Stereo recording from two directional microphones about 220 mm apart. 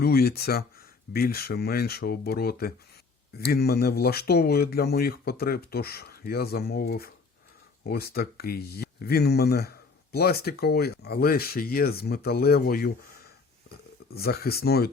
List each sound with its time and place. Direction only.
0.0 s speech: 45° left (ahead or behind)
14.1 s speech: 45° left (ahead or behind)